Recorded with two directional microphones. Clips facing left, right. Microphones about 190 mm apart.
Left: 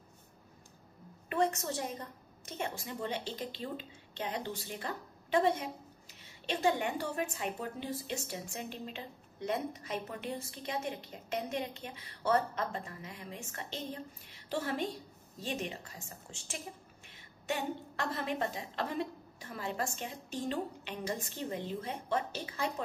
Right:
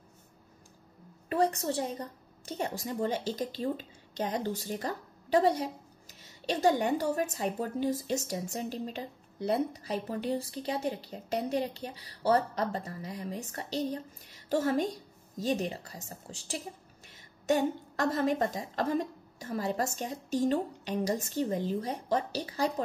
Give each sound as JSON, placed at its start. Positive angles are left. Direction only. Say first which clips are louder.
{"t": 1.3, "sound": "a woman's voice", "louder": "right 4 dB", "side_deg": -35}